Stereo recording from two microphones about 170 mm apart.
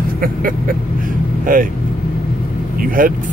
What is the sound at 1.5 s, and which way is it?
Speech, 55° right (ahead or behind).